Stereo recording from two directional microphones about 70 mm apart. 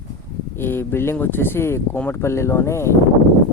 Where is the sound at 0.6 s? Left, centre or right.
Left.